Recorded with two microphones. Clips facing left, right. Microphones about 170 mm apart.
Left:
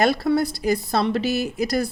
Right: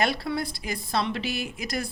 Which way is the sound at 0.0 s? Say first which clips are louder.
Left 8 dB; 40° left (ahead or behind).